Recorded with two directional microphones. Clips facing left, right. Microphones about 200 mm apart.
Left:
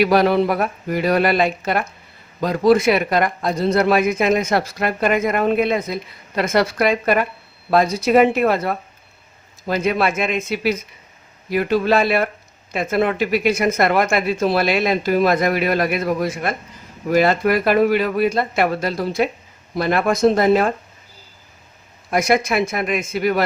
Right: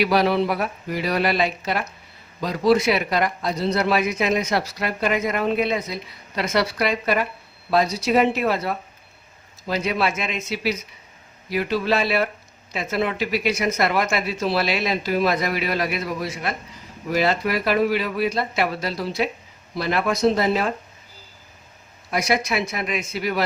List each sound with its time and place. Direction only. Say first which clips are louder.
0.0 s speech: left 4 dB; 50° left (ahead or behind)
22.1 s speech: left 5 dB; 50° left (ahead or behind)